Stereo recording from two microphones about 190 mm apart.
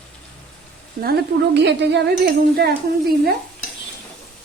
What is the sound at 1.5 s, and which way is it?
Speech, 65° right (ahead or behind).